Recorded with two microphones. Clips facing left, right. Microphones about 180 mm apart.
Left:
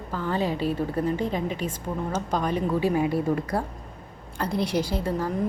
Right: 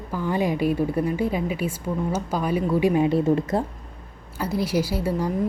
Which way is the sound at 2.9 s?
25° right (ahead or behind).